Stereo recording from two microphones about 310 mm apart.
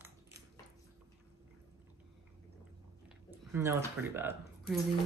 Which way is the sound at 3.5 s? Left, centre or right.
Centre.